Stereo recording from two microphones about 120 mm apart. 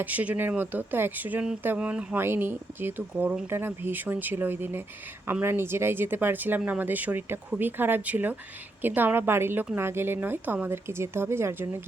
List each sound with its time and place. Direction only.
0.0 s speech: 15° right (ahead or behind)